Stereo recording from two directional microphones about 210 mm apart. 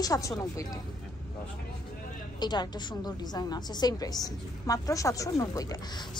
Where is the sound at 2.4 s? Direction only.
20° left (ahead or behind).